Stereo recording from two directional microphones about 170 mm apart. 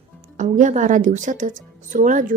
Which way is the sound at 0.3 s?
45° right (ahead or behind).